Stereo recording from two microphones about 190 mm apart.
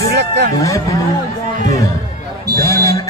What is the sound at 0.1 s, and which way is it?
Speech, 65° right (ahead or behind).